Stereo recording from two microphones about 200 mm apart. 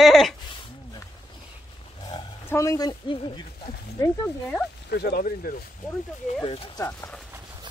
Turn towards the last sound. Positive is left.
turn(degrees=15)  # may be behind; listen again after turning